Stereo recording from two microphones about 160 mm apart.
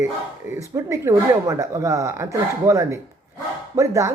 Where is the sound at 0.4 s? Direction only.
15° right (ahead or behind).